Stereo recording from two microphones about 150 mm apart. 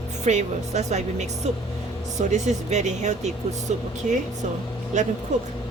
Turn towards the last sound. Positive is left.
turn(degrees=-50)  # may be behind; listen again after turning